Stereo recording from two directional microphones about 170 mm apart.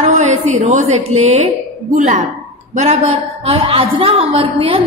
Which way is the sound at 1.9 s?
45° right (ahead or behind).